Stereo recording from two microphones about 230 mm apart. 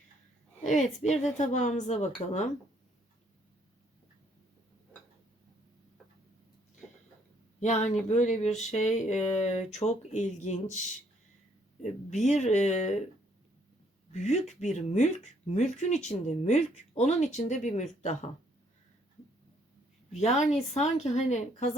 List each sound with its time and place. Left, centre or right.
0.6 s speech: left
7.6 s speech: left
11.8 s speech: left
14.1 s speech: left
20.1 s speech: left